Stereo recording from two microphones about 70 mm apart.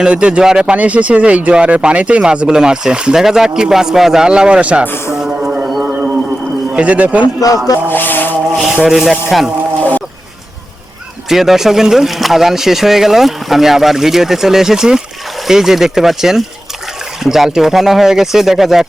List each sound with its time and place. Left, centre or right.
0.0 s speech: centre
5.2 s a sound: centre
6.7 s a man's voice: centre
7.3 s speech: left
7.9 s a sound: left
8.8 s speech: centre
11.3 s speech: centre